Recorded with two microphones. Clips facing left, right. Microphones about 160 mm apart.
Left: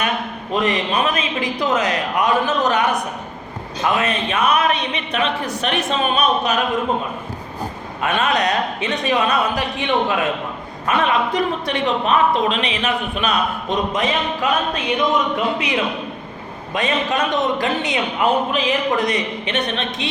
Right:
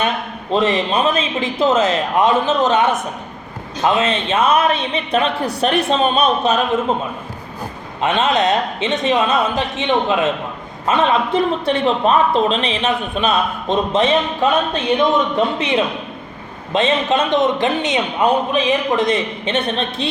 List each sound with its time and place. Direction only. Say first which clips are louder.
0.5 s a man's voice: right 3 dB; 25° right (ahead or behind)
8.0 s a man's voice: right 3 dB; 25° right (ahead or behind)
15.4 s a man's voice: right 3 dB; 25° right (ahead or behind)